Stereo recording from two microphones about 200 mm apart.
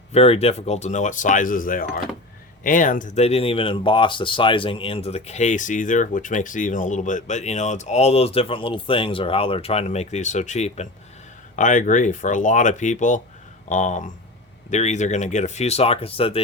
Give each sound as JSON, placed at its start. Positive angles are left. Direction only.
{"t": 0.1, "sound": "speech", "side_deg": 30}